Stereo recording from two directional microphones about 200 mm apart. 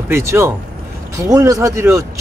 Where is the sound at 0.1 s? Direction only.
15° right (ahead or behind).